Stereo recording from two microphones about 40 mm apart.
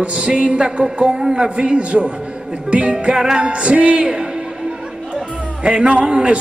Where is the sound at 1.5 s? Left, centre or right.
Right.